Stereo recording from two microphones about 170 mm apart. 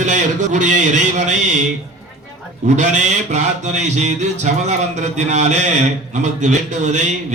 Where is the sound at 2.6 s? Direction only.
45° right (ahead or behind).